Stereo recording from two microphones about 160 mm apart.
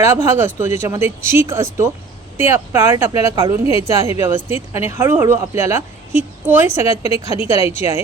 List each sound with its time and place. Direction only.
0.0 s speech: 15° right (ahead or behind)